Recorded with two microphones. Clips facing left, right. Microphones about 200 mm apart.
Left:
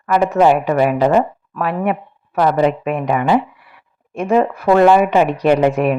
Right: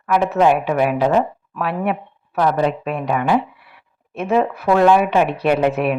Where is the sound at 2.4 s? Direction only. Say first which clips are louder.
Left 3 dB; 5° left (ahead or behind).